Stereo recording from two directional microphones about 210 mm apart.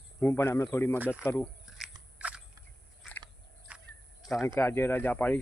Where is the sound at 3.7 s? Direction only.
5° right (ahead or behind).